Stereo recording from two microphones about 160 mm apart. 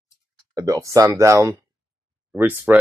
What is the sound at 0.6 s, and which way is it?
Speech, 20° right (ahead or behind).